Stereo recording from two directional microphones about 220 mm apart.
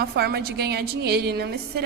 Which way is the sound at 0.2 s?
45° right (ahead or behind).